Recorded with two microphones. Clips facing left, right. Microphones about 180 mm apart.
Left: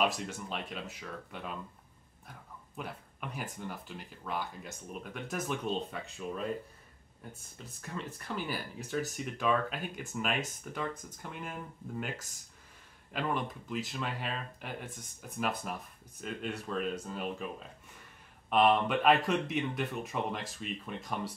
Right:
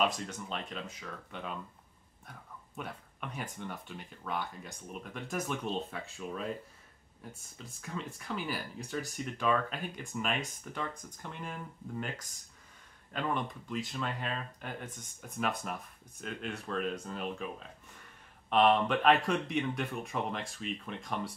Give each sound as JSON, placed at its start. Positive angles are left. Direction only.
{"t": 0.0, "sound": "speech", "side_deg": 5}